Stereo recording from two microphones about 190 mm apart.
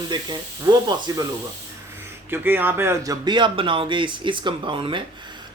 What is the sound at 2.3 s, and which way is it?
Speech, 10° right (ahead or behind).